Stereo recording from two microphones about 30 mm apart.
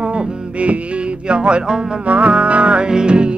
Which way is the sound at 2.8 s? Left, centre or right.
Right.